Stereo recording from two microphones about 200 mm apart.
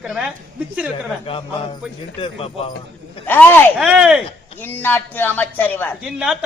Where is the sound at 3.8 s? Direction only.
5° right (ahead or behind).